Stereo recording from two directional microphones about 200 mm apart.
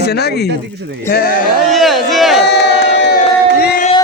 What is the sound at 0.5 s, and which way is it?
Speech, 60° right (ahead or behind).